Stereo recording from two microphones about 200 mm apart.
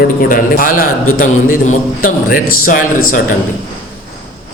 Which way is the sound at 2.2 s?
45° left (ahead or behind).